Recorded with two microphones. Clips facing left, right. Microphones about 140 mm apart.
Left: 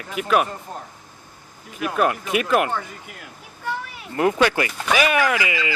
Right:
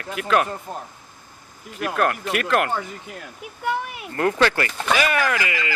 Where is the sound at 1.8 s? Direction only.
10° left (ahead or behind).